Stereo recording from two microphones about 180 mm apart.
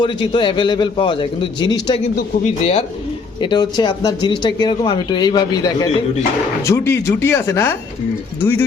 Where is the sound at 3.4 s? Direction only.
25° left (ahead or behind).